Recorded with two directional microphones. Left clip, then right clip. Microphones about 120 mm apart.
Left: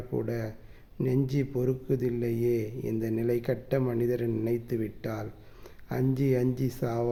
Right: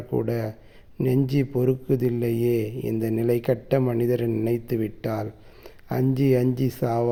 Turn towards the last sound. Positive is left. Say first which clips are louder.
# right 7 dB
turn(degrees=-35)  # may be behind; listen again after turning